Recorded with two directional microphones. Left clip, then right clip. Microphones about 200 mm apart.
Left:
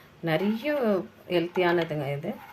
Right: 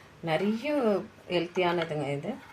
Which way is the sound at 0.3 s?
20° left (ahead or behind).